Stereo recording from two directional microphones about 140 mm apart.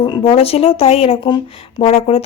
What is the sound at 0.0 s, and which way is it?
Speech, 40° left (ahead or behind).